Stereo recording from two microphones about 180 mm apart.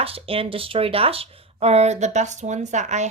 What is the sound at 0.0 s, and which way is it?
Speech, 30° right (ahead or behind).